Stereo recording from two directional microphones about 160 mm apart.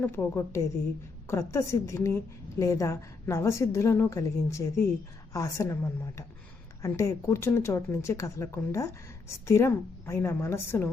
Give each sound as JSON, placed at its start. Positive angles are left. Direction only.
{"t": 0.0, "sound": "a woman's voice", "side_deg": 15}
{"t": 6.8, "sound": "speech", "side_deg": 20}